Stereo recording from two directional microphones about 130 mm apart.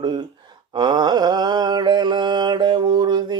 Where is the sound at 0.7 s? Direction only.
35° right (ahead or behind).